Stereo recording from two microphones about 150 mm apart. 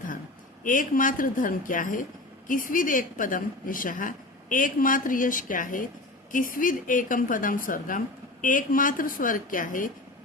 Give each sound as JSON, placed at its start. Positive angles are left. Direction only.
{"t": 0.6, "sound": "a woman's voice", "side_deg": 60}